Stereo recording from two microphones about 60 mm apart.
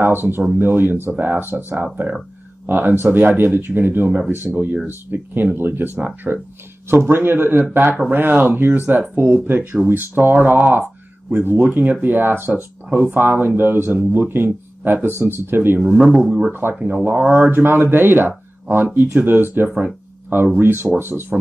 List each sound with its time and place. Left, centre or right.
0.0 s speech: right
6.9 s speech: right
15.9 s speech: centre; by 21.4 s right